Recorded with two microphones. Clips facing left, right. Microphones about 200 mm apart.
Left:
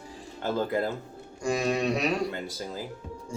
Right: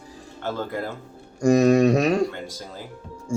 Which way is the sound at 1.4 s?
45° right (ahead or behind).